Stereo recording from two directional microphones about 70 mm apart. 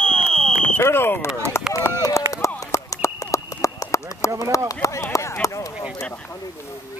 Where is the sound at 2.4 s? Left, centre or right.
Left.